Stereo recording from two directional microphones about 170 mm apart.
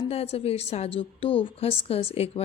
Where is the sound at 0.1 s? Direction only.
35° left (ahead or behind).